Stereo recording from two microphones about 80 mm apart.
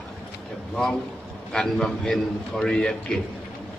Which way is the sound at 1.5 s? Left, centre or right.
Centre.